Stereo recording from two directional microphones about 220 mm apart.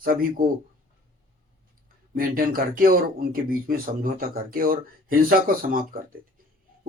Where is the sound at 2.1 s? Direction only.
40° right (ahead or behind).